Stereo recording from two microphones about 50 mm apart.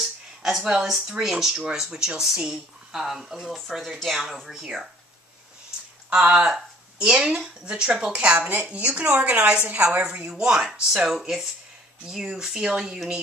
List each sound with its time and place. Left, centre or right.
0.0 s a sound: centre
0.7 s speech: centre
6.0 s speech: right
8.4 s speech: right
8.7 s speech: right